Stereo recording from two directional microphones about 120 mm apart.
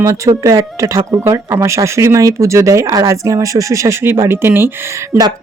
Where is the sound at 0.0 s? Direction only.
25° right (ahead or behind).